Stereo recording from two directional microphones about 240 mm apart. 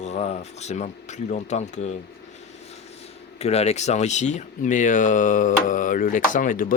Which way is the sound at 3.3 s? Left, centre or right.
Left.